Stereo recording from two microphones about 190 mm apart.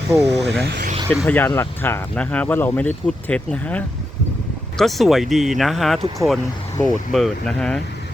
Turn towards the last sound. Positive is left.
turn(degrees=5)  # may be behind; listen again after turning